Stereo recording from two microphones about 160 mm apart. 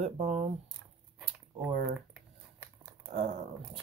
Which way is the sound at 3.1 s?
40° right (ahead or behind).